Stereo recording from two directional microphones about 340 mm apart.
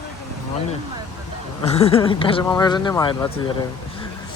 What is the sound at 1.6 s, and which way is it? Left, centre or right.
A woman's voice, centre.